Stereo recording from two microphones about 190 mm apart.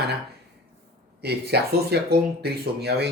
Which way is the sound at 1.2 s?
60° right (ahead or behind).